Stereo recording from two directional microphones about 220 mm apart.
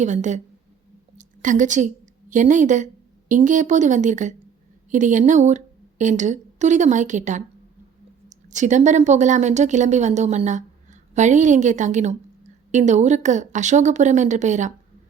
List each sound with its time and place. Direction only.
0.0 s a woman's voice: 35° right (ahead or behind)
8.4 s a woman's voice: 35° right (ahead or behind)